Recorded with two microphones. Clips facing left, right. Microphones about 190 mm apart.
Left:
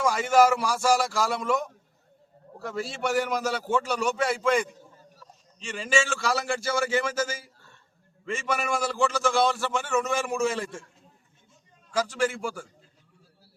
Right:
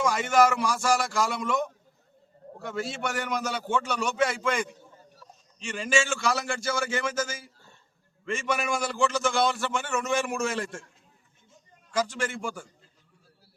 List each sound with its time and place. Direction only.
0.0 s a man's voice: 5° left (ahead or behind)
3.1 s a man's voice: 5° left (ahead or behind)
5.6 s a man's voice: centre (ahead or behind)
12.2 s a man's voice: 5° left (ahead or behind)